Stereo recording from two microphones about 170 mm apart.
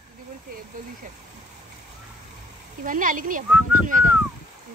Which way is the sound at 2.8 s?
50° right (ahead or behind).